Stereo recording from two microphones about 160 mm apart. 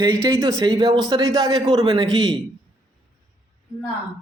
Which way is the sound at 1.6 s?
35° right (ahead or behind).